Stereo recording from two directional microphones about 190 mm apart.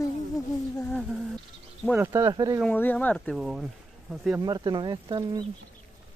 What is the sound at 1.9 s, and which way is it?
Speech, 15° right (ahead or behind).